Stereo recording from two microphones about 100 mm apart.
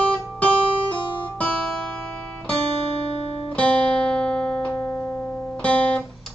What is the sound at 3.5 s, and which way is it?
Music, 10° left (ahead or behind).